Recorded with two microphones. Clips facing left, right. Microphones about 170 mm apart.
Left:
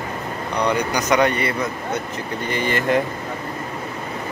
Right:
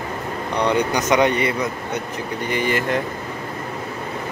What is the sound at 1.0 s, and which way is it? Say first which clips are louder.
A man's voice: left 1 dB; 20° right (ahead or behind).